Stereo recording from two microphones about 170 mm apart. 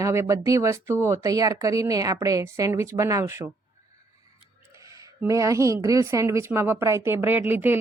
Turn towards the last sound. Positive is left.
turn(degrees=-10)  # may be behind; listen again after turning